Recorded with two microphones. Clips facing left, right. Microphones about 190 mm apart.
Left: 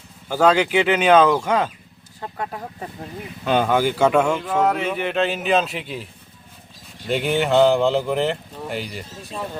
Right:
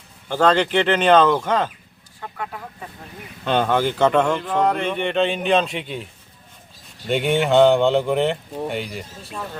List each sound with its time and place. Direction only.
0.3 s speech: 10° left (ahead or behind)
2.2 s speech: 35° left (ahead or behind)
3.4 s speech: 5° left (ahead or behind)
7.1 s speech: centre (ahead or behind)